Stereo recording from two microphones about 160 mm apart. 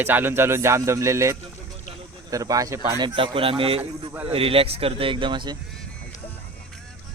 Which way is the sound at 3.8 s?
10° right (ahead or behind).